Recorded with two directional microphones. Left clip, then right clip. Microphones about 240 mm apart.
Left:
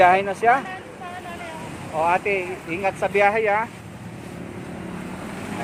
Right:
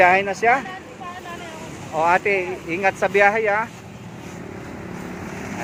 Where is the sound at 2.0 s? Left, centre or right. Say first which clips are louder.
Right 3 dB; centre.